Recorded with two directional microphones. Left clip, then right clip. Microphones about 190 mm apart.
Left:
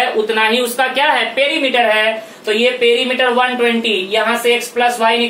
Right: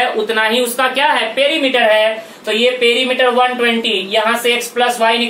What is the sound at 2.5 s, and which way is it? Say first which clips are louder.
Speech: even; 35° right (ahead or behind).